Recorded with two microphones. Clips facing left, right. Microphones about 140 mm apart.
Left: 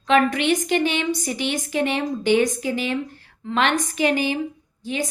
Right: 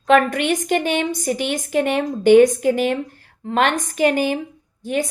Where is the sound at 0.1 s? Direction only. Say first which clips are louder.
Right 2 dB; 50° right (ahead or behind).